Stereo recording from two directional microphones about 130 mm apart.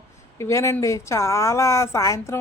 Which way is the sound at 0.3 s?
20° left (ahead or behind).